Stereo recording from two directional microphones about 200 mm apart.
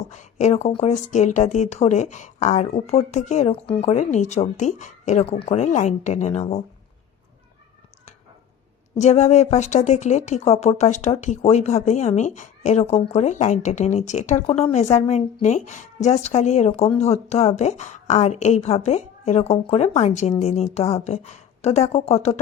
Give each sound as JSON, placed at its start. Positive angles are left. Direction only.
{"t": 0.1, "sound": "speech", "side_deg": 35}
{"t": 9.0, "sound": "speech", "side_deg": 35}